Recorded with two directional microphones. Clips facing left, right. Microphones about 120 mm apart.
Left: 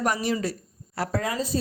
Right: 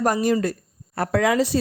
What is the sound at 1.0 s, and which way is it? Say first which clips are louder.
Speech: right 8 dB; 65° right (ahead or behind).